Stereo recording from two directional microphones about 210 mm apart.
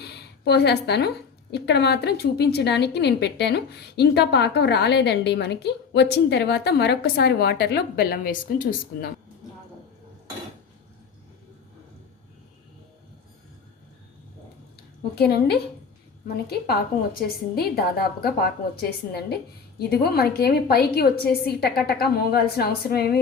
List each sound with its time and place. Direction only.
0.0 s a woman's voice: 50° left (ahead or behind)
15.1 s a woman's voice: 50° left (ahead or behind)